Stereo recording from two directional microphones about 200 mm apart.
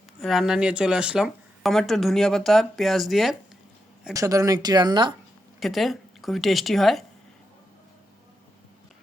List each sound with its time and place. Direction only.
0.2 s speech: centre (ahead or behind)
4.1 s speech: 15° right (ahead or behind)
5.5 s speech: centre (ahead or behind)